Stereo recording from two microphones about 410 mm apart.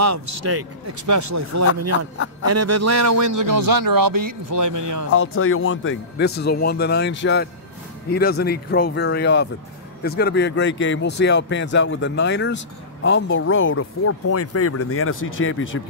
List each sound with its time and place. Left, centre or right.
0.0 s a man's voice: right
5.1 s speech: left